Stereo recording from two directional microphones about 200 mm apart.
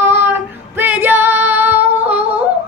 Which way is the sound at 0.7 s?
10° right (ahead or behind).